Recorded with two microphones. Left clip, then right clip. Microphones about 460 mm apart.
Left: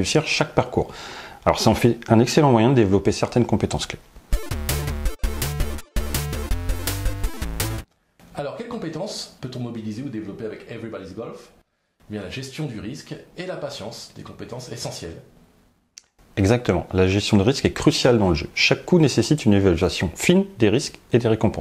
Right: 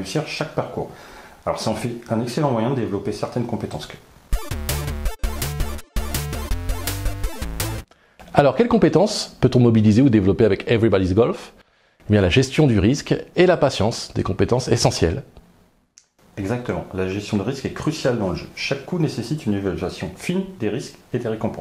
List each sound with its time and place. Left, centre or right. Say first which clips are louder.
0.0 s speech: left 5 dB; left
4.3 s music: even; centre
8.4 s speech: right 15 dB; right
16.4 s speech: left 5 dB; left